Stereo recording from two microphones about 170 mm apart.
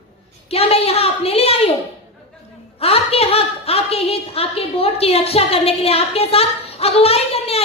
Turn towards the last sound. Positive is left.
turn(degrees=35)  # may be behind; listen again after turning